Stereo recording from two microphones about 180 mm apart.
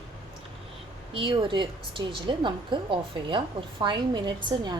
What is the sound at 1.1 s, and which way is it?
A woman's voice, 30° right (ahead or behind).